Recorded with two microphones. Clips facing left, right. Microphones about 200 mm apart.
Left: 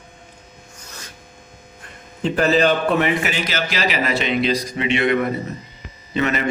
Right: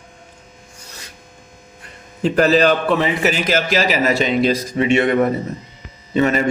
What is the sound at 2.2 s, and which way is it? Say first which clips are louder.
A man's voice: right 3 dB; 40° right (ahead or behind).